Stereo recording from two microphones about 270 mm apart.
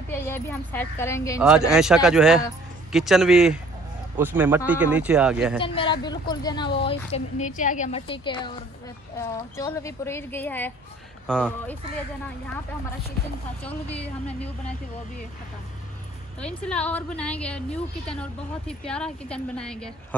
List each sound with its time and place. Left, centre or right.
0.1 s a woman's voice: centre
1.4 s a woman's voice: centre
5.6 s a woman's voice: centre
16.3 s a woman's voice: centre